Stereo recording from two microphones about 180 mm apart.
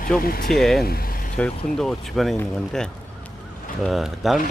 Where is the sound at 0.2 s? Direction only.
55° left (ahead or behind).